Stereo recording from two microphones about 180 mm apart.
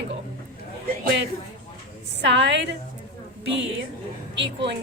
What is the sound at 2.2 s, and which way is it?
Speech, 80° right.